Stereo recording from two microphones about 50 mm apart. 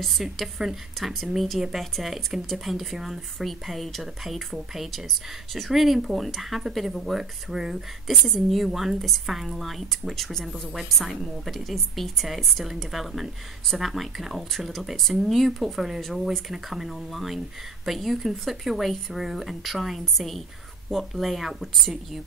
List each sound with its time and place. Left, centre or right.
0.0 s a woman's voice: centre
8.1 s a woman's voice: centre